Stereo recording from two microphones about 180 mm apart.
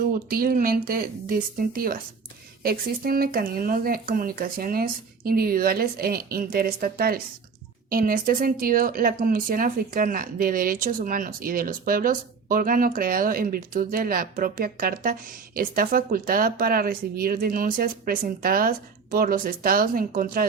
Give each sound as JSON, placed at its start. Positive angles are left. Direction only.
{"t": 0.0, "sound": "speech", "side_deg": -55}